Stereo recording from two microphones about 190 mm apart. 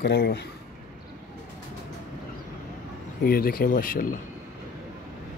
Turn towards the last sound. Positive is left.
turn(degrees=45)  # may be behind; listen again after turning